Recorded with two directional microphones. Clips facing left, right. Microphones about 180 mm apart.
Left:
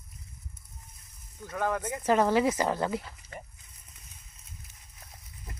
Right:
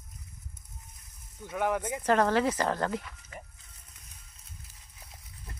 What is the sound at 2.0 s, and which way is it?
Speech, 10° left (ahead or behind).